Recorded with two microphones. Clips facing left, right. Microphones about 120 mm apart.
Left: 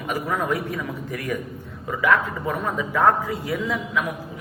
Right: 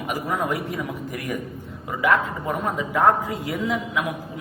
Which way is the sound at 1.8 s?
20° right (ahead or behind).